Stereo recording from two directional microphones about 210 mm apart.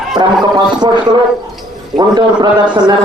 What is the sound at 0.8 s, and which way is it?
A man's voice, 20° right (ahead or behind).